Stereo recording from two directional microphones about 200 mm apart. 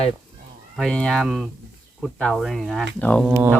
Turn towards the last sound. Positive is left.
turn(degrees=-10)  # may be behind; listen again after turning